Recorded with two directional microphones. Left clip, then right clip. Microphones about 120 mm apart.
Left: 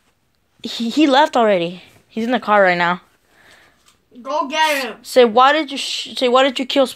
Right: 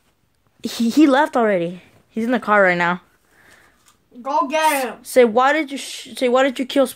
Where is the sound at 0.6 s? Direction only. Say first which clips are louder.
Right 1 dB; 60° right (ahead or behind).